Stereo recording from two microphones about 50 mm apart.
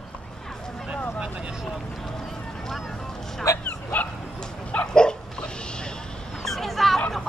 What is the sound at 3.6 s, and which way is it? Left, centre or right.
Bow-wow, left.